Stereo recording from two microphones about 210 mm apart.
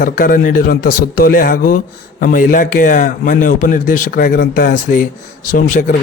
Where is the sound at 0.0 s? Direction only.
40° left (ahead or behind).